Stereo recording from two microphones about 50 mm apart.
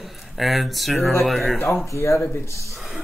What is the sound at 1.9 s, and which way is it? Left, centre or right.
Speech, left.